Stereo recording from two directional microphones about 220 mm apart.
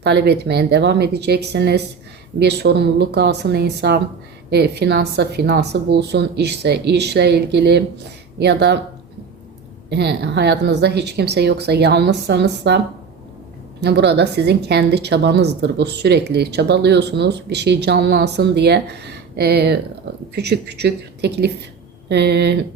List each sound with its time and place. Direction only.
0.0 s a woman's voice: 50° right (ahead or behind)
9.9 s a woman's voice: 50° right (ahead or behind)
13.8 s a woman's voice: 50° right (ahead or behind)